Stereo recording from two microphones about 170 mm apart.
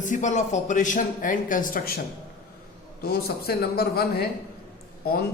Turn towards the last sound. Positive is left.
turn(degrees=65)  # may be behind; listen again after turning